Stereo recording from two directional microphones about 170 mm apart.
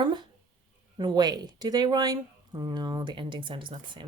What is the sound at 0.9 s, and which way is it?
Speech, 25° right (ahead or behind).